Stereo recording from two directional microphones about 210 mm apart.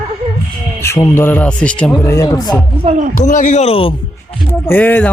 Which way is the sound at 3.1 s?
35° left (ahead or behind).